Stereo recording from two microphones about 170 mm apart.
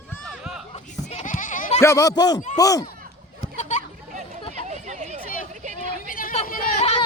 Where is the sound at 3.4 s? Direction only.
45° left (ahead or behind).